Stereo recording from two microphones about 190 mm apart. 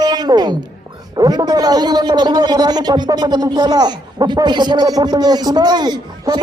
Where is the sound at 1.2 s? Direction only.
20° right (ahead or behind).